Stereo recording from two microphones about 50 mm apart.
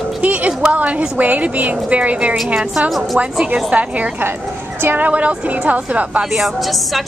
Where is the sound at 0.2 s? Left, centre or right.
Right.